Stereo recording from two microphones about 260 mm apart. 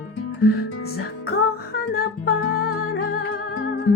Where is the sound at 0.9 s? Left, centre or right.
Left.